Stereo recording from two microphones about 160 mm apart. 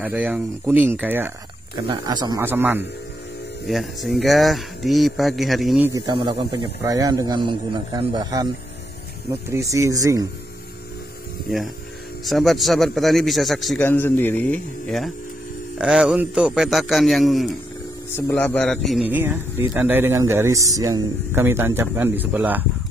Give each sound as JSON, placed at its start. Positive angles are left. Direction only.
{"t": 0.0, "sound": "speech", "side_deg": -10}
{"t": 1.9, "sound": "speech", "side_deg": -25}
{"t": 2.4, "sound": "speech", "side_deg": -10}
{"t": 3.6, "sound": "speech", "side_deg": 0}
{"t": 5.9, "sound": "a man's voice", "side_deg": -30}
{"t": 6.8, "sound": "speech", "side_deg": -20}
{"t": 12.3, "sound": "speech", "side_deg": 0}
{"t": 13.8, "sound": "speech", "side_deg": 15}
{"t": 18.1, "sound": "speech", "side_deg": 15}
{"t": 19.0, "sound": "speech", "side_deg": -10}